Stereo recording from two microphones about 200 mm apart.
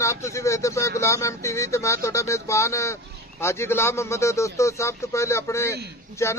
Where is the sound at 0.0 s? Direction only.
15° left (ahead or behind).